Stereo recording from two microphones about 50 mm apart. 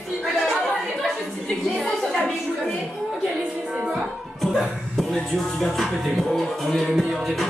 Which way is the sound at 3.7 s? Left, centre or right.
Right.